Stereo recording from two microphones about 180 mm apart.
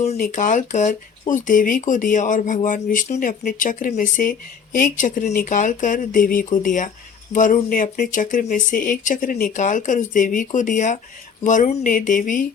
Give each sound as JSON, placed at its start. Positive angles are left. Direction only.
{"t": 0.2, "sound": "speech", "side_deg": 45}